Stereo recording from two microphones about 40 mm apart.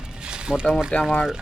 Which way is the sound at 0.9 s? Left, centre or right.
Left.